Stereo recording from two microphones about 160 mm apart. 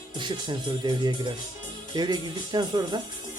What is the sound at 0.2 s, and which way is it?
Speech, 30° right (ahead or behind).